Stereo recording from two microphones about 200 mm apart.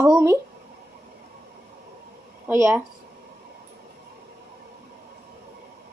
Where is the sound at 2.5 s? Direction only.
10° right (ahead or behind).